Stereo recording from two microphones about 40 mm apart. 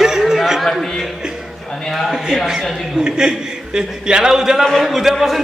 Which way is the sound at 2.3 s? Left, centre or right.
Centre.